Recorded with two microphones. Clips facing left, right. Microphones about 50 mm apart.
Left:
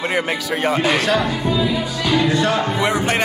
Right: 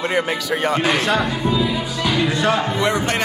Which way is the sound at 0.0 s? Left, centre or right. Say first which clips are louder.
Even; centre.